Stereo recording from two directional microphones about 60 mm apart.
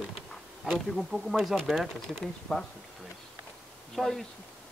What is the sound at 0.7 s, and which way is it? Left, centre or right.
Speech, centre.